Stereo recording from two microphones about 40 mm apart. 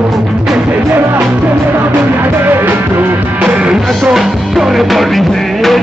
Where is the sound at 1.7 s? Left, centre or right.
Right.